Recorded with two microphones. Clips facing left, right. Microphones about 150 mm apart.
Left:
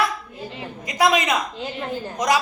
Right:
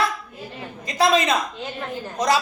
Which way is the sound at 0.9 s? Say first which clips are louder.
Right 1 dB; 15° left (ahead or behind).